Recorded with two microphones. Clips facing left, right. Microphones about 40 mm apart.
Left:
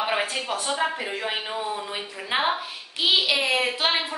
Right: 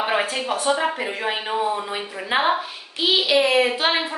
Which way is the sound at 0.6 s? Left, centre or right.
Centre.